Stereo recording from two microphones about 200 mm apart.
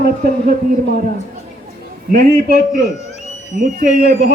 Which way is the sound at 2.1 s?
50° right (ahead or behind).